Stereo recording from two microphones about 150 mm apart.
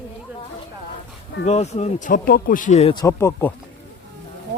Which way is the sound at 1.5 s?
45° left (ahead or behind).